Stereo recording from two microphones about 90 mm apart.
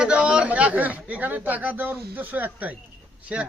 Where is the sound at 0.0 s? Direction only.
15° right (ahead or behind).